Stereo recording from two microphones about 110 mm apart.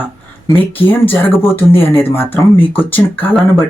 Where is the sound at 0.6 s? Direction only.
55° left (ahead or behind).